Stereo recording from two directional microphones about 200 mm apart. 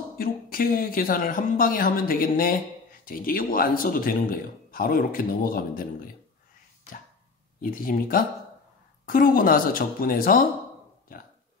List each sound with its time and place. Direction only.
0.1 s speech: 45° left (ahead or behind)
7.6 s speech: 45° left (ahead or behind)